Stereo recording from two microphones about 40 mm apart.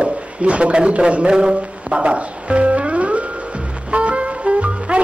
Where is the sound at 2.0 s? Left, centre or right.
Right.